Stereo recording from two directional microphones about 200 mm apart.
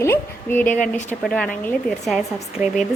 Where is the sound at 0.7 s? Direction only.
40° left (ahead or behind).